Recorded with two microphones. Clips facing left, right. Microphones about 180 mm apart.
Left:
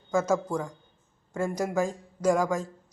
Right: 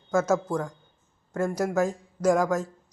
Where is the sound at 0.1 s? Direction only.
10° left (ahead or behind).